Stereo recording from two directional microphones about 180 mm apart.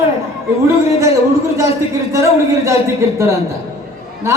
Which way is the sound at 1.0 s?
15° right (ahead or behind).